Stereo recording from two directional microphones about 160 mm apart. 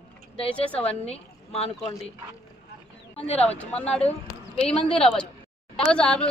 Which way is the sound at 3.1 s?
40° left (ahead or behind).